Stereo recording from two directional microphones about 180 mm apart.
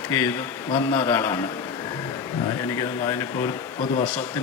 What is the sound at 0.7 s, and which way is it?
Speech, 30° left (ahead or behind).